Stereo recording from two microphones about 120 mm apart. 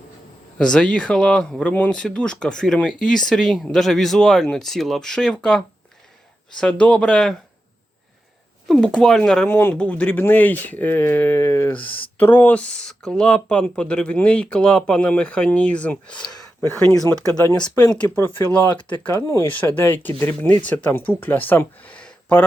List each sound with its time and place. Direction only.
0.6 s speech: 5° left (ahead or behind)
8.6 s speech: 5° left (ahead or behind)
9.5 s speech: 15° left (ahead or behind)
11.7 s speech: 45° left (ahead or behind)
12.1 s speech: 15° left (ahead or behind)
18.4 s speech: 25° left (ahead or behind)
19.5 s speech: 15° left (ahead or behind)